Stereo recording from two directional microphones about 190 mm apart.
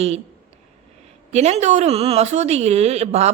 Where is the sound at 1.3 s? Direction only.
35° right (ahead or behind).